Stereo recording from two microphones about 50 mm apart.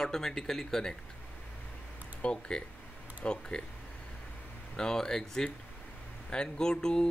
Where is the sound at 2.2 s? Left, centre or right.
Left.